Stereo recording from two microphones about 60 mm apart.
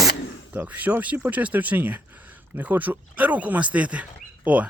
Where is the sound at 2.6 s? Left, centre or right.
Right.